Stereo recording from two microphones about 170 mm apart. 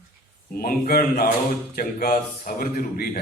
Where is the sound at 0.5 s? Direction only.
60° left (ahead or behind).